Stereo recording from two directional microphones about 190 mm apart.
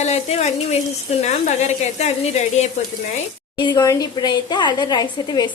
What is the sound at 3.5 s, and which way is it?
A woman's voice, 25° left (ahead or behind).